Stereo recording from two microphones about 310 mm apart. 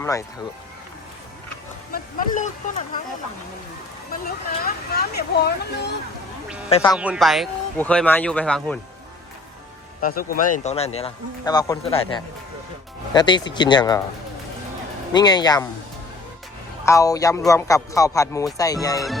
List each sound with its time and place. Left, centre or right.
0.0 s speech: centre
1.9 s speech: left
4.6 s speech: left
6.7 s speech: centre
6.9 s speech: centre
10.0 s speech: left
15.1 s speech: centre
16.8 s speech: centre